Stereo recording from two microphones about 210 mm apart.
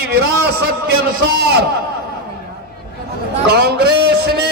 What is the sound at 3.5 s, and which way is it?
Speech, 50° right (ahead or behind).